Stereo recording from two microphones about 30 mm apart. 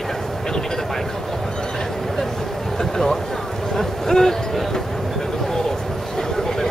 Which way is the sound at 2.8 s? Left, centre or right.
Centre.